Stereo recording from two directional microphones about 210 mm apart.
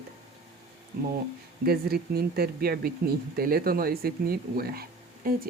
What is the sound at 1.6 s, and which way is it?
Speech, 45° right (ahead or behind).